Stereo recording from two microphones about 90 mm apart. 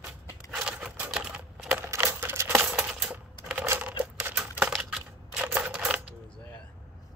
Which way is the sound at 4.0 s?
20° right (ahead or behind).